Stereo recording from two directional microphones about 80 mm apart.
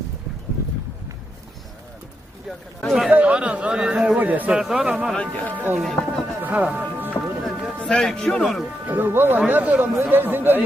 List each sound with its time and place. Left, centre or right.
2.5 s speech: centre
3.1 s a man's voice: centre
4.6 s a man's voice: centre
5.1 s a man's voice: centre
5.5 s speech: centre
5.8 s a sound: centre
6.4 s music: centre
7.4 s music: centre
7.8 s a man's voice: centre
8.9 s speech: right